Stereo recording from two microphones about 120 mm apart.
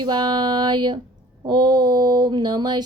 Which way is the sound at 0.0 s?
40° right (ahead or behind).